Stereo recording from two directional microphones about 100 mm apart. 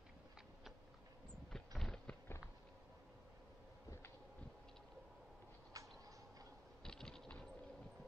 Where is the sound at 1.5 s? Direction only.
5° left (ahead or behind).